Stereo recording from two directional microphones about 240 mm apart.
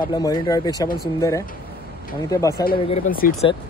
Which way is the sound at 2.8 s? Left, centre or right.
Left.